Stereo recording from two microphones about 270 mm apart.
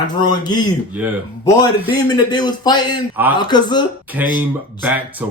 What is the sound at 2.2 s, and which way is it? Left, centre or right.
Speech, centre.